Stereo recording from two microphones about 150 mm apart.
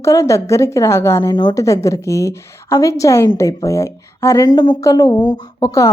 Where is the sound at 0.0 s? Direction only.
20° left (ahead or behind).